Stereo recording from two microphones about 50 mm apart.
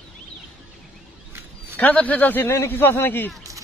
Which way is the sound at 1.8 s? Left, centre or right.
Left.